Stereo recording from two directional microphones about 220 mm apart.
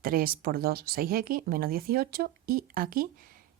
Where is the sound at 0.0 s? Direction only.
40° right (ahead or behind).